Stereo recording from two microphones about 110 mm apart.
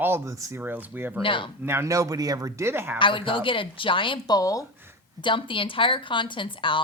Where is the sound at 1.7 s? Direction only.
25° right (ahead or behind).